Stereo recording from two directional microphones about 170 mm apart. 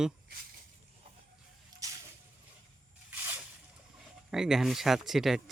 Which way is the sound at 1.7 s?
25° right (ahead or behind).